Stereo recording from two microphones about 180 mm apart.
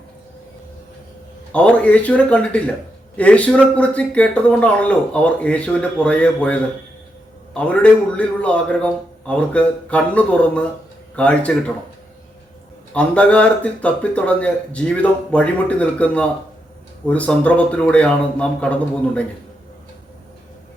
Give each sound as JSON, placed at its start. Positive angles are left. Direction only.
{"t": 1.5, "sound": "speech", "side_deg": 5}
{"t": 12.9, "sound": "speech", "side_deg": 5}